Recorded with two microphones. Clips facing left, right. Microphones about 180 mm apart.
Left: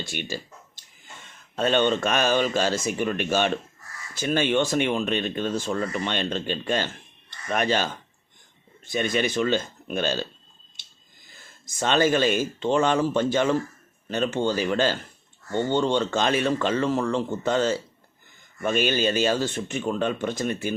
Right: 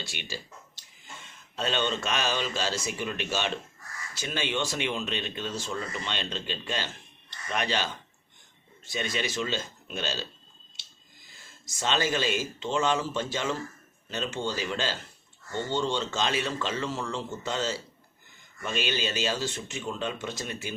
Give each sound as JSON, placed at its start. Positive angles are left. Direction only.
{"t": 0.1, "sound": "speech", "side_deg": 50}
{"t": 1.5, "sound": "speech", "side_deg": 55}
{"t": 11.8, "sound": "speech", "side_deg": 55}